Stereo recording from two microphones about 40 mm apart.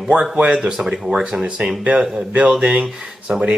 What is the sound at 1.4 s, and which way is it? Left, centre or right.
Speech, right.